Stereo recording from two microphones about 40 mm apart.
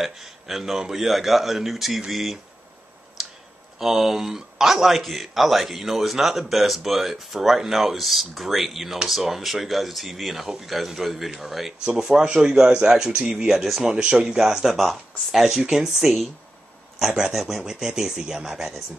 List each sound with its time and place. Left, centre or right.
0.0 s a man's voice: centre
3.8 s a man's voice: centre
11.8 s speech: centre
13.5 s a man's voice: centre
13.9 s a man's voice: centre
17.3 s a man's voice: centre
17.6 s speech: centre